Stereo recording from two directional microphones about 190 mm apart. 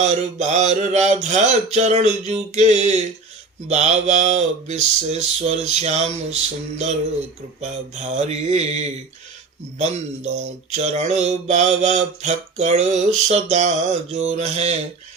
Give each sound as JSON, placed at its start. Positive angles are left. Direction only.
{"t": 0.0, "sound": "mantra", "side_deg": -40}
{"t": 7.6, "sound": "mantra", "side_deg": -35}